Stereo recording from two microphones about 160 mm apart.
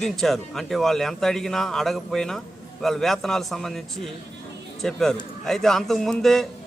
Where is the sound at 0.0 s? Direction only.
Centre (ahead or behind).